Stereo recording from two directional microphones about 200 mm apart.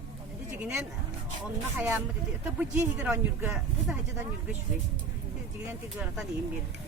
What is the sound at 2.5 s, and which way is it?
Speech, 5° right (ahead or behind).